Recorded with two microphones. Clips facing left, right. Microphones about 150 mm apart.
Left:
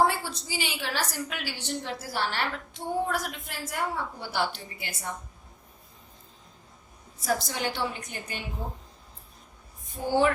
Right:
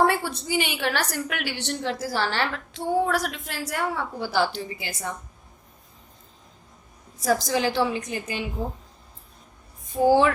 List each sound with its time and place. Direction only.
0.0 s a woman's voice: 60° right (ahead or behind); by 5.1 s 90° right
7.2 s a woman's voice: 90° right
10.1 s a woman's voice: 90° right